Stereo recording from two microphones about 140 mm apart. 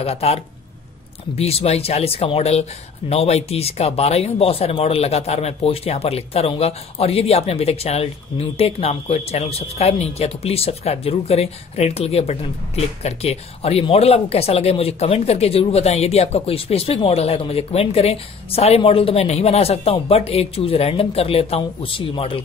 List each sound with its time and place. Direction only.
0.0 s speech: 45° left (ahead or behind)